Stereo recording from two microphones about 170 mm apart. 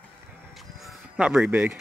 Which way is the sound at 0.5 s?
Centre (ahead or behind).